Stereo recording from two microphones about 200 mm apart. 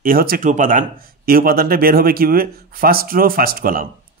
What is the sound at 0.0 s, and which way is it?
Speech, 45° right (ahead or behind).